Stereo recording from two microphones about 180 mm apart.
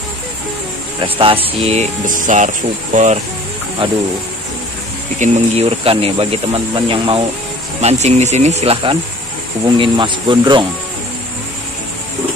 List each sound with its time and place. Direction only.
1.0 s speech: 30° right (ahead or behind)
3.8 s speech: 30° right (ahead or behind)
5.2 s speech: 35° right (ahead or behind)
7.8 s speech: 40° right (ahead or behind)